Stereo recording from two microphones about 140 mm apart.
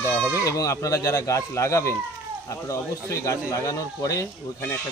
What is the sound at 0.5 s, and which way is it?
Speech, 25° left (ahead or behind).